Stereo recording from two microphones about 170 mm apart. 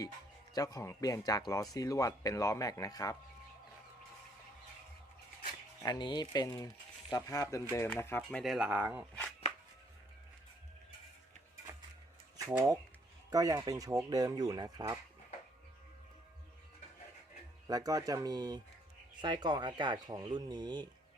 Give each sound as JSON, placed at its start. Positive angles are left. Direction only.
{"t": 0.5, "sound": "speech", "side_deg": 20}
{"t": 5.8, "sound": "speech", "side_deg": 25}
{"t": 12.4, "sound": "speech", "side_deg": -15}
{"t": 17.7, "sound": "speech", "side_deg": -20}